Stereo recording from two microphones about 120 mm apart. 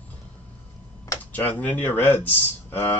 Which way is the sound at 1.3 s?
15° left (ahead or behind).